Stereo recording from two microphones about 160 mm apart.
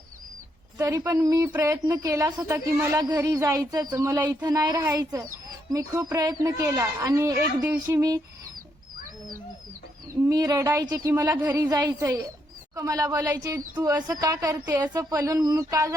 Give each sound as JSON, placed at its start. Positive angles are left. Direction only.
{"t": 0.8, "sound": "speech", "side_deg": -20}
{"t": 10.2, "sound": "speech", "side_deg": -20}